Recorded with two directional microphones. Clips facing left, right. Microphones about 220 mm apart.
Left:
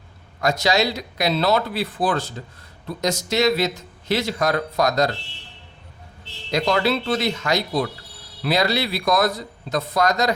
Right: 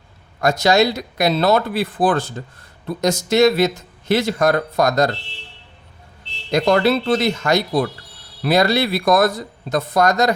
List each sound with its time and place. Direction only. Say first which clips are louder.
0.4 s speech: right 5 dB; 50° right (ahead or behind)
6.5 s speech: right 5 dB; 50° right (ahead or behind)